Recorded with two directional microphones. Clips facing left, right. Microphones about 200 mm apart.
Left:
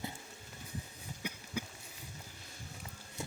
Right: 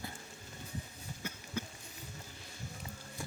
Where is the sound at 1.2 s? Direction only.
15° left (ahead or behind).